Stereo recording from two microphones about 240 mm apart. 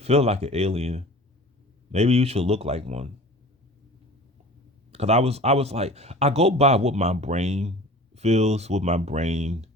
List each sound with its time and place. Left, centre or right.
0.0 s speech: right
4.9 s speech: right